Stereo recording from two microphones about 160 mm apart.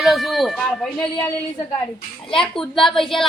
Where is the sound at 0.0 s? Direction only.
Centre (ahead or behind).